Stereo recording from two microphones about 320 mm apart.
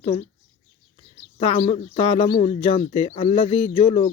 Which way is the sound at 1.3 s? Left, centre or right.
Centre.